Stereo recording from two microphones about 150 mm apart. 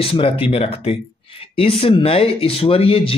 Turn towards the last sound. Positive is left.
turn(degrees=40)  # may be behind; listen again after turning